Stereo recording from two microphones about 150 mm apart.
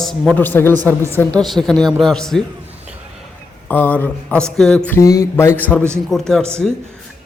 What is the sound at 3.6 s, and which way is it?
A man's voice, 10° left (ahead or behind).